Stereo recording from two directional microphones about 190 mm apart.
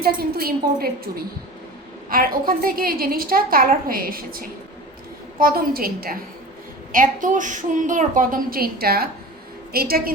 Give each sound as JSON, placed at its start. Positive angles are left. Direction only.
{"t": 0.0, "sound": "a woman's voice", "side_deg": -55}